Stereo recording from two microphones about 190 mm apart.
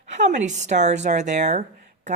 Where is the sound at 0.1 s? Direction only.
40° right (ahead or behind).